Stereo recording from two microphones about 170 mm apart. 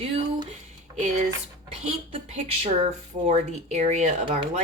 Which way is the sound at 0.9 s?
45° right (ahead or behind).